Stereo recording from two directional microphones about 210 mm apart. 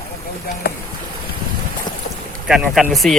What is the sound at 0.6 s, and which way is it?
Boat, 50° left (ahead or behind).